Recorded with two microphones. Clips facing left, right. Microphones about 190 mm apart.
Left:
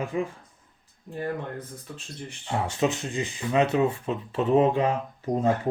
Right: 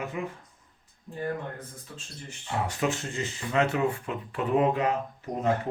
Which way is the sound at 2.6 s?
25° left (ahead or behind).